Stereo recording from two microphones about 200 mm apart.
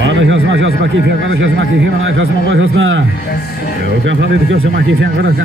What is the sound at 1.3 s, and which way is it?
Speech, 70° right (ahead or behind).